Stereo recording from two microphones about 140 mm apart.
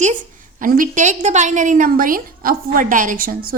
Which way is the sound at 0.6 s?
75° right (ahead or behind).